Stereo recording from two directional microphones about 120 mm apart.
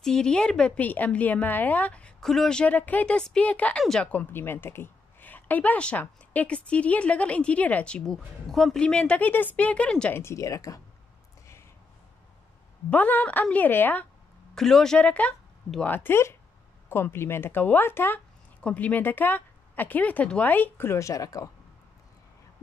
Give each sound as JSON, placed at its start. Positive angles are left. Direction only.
{"t": 0.0, "sound": "a woman's voice", "side_deg": 5}
{"t": 10.1, "sound": "speech", "side_deg": 25}
{"t": 12.9, "sound": "a woman's voice", "side_deg": 15}
{"t": 14.5, "sound": "a woman's voice", "side_deg": 5}